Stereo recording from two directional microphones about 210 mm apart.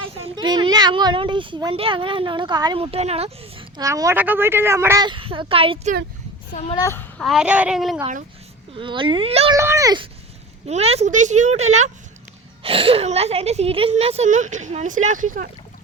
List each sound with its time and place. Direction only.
0.2 s a child's voice: 20° right (ahead or behind)
3.8 s a woman's voice: 15° right (ahead or behind)
6.5 s a child's voice: 30° left (ahead or behind)
6.7 s a child's voice: 10° left (ahead or behind)
7.2 s a child's voice: centre (ahead or behind)
8.7 s a child's voice: 25° right (ahead or behind)
9.6 s a woman's voice: 15° right (ahead or behind)
10.7 s speech: 30° right (ahead or behind)